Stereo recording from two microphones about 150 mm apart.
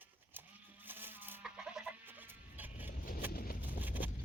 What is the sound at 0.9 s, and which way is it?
Chicken, 15° right (ahead or behind).